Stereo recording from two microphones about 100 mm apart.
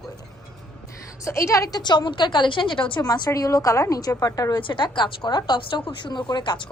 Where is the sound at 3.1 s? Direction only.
40° left (ahead or behind).